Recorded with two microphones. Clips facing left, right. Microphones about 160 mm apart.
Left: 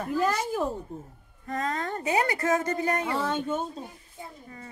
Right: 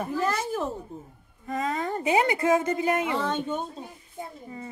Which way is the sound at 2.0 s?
20° right (ahead or behind).